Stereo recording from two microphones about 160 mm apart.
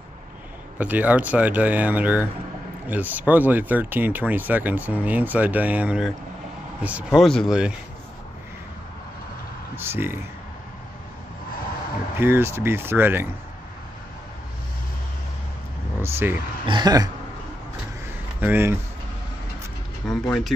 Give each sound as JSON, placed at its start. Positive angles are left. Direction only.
{"t": 0.7, "sound": "speech", "side_deg": -10}
{"t": 9.8, "sound": "speech", "side_deg": -15}
{"t": 12.2, "sound": "speech", "side_deg": -15}
{"t": 16.0, "sound": "vehicle", "side_deg": -15}
{"t": 16.6, "sound": "speech", "side_deg": -25}
{"t": 18.4, "sound": "speech", "side_deg": -15}
{"t": 20.0, "sound": "speech", "side_deg": 5}